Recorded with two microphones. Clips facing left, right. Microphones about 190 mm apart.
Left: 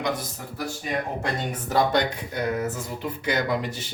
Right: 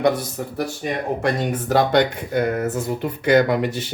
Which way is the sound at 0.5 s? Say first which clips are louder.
Right 3 dB; 65° right (ahead or behind).